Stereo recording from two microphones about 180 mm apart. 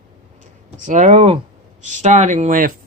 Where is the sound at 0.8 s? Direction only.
40° right (ahead or behind).